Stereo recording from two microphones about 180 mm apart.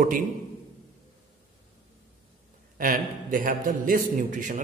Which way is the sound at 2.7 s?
50° right (ahead or behind).